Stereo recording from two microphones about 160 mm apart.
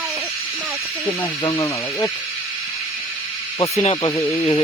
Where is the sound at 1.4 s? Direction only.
20° left (ahead or behind).